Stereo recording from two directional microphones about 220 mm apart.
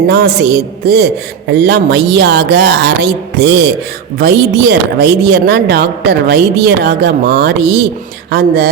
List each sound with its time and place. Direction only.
0.1 s a woman's voice: 50° right (ahead or behind)